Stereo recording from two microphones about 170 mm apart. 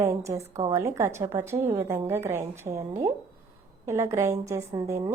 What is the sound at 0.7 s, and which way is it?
A woman's voice, 15° right (ahead or behind).